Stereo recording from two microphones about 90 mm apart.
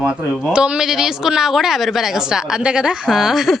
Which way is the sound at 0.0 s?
20° right (ahead or behind).